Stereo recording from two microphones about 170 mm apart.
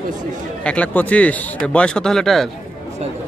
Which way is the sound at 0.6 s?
5° left (ahead or behind).